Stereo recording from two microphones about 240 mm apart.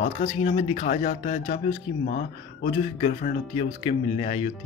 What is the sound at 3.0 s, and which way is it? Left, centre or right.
A man's voice, left.